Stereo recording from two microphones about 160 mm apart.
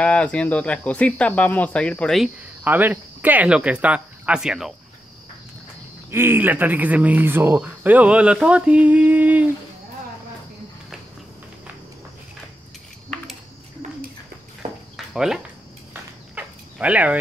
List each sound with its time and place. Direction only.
0.0 s speech: 10° left (ahead or behind)
2.6 s speech: 10° right (ahead or behind)
6.0 s speech: 15° right (ahead or behind)
14.6 s cricket: 40° right (ahead or behind)
15.1 s speech: 5° right (ahead or behind)
15.9 s a sound: 10° right (ahead or behind)